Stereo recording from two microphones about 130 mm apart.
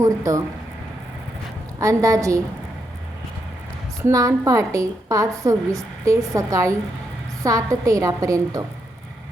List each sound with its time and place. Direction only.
0.0 s a woman's voice: 25° right (ahead or behind)
1.8 s a woman's voice: 25° right (ahead or behind)
4.0 s a woman's voice: 25° right (ahead or behind)